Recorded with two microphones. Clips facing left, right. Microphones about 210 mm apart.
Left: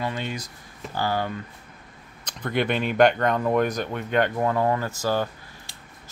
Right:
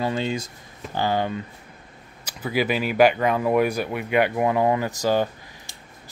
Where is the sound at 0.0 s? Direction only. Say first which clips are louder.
Right 5 dB; 30° right (ahead or behind).